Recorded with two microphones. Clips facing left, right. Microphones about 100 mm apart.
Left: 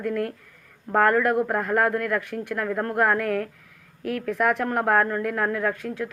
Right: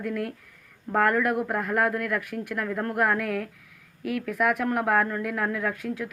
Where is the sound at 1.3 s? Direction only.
30° left (ahead or behind).